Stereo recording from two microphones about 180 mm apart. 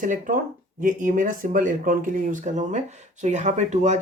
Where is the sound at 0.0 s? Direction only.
45° right (ahead or behind).